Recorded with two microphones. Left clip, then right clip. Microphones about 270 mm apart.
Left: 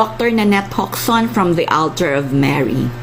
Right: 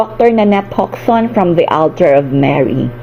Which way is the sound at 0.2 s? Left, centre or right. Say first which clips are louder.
Right 6 dB; centre.